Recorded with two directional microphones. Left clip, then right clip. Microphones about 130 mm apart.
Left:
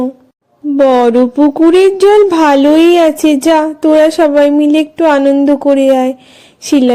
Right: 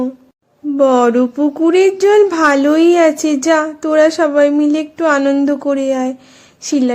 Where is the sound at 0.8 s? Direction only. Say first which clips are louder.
Left 3 dB; 40° left (ahead or behind).